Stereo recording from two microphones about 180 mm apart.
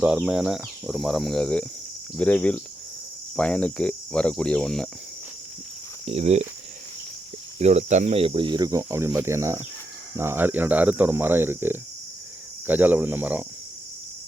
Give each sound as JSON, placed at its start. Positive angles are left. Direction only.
{"t": 0.0, "sound": "speech", "side_deg": -5}
{"t": 6.1, "sound": "speech", "side_deg": -35}
{"t": 7.6, "sound": "speech", "side_deg": -40}